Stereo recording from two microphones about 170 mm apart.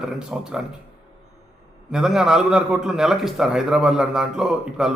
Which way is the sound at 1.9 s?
5° right (ahead or behind).